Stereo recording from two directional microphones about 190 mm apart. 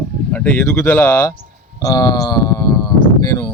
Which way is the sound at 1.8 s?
20° left (ahead or behind).